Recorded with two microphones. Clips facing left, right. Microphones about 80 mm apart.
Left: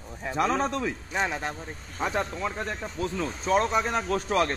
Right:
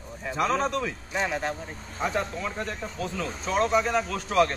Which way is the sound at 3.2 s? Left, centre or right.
Left.